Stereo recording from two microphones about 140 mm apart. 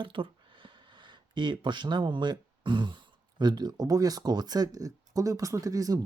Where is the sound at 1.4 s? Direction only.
35° right (ahead or behind).